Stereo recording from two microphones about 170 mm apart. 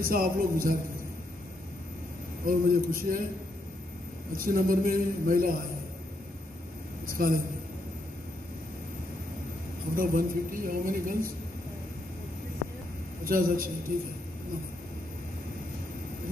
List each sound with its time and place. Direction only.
0.0 s a woman's voice: 55° right (ahead or behind)
2.4 s a woman's voice: 55° right (ahead or behind)
4.4 s a woman's voice: 55° right (ahead or behind)
7.1 s a woman's voice: 55° right (ahead or behind)
9.9 s a woman's voice: 55° right (ahead or behind)
13.2 s a woman's voice: 55° right (ahead or behind)